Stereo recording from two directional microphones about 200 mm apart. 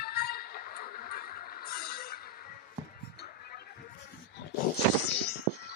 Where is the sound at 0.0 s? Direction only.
50° left (ahead or behind).